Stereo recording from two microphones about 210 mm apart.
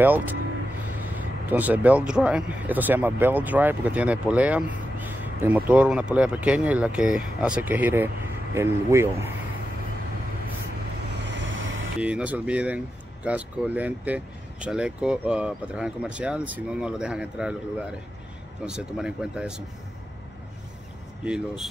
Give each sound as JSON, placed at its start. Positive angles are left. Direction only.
{"t": 0.0, "sound": "speech", "side_deg": -10}
{"t": 1.5, "sound": "speech", "side_deg": -10}
{"t": 11.1, "sound": "vehicle", "side_deg": -55}
{"t": 12.0, "sound": "speech", "side_deg": -5}
{"t": 18.7, "sound": "speech", "side_deg": -5}
{"t": 21.2, "sound": "speech", "side_deg": -5}